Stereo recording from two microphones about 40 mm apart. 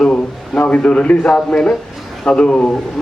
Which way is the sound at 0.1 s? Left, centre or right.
Left.